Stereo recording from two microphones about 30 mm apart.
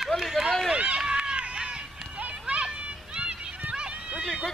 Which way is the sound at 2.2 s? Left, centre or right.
Right.